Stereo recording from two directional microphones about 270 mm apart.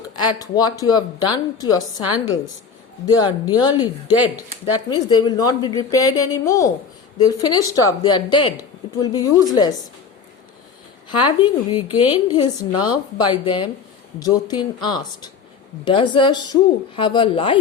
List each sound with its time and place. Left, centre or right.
0.2 s speech: centre
3.1 s speech: centre
11.1 s a man's voice: centre